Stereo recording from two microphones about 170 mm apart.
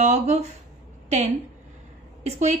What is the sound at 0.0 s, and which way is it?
Speech, 40° right (ahead or behind).